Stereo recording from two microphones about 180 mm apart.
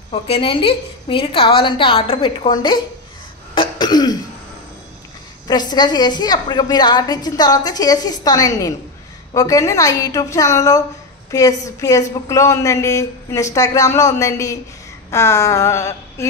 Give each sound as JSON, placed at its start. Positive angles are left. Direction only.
{"t": 0.1, "sound": "a woman's voice", "side_deg": 30}
{"t": 3.5, "sound": "throat clearing", "side_deg": 25}
{"t": 5.5, "sound": "a woman's voice", "side_deg": 25}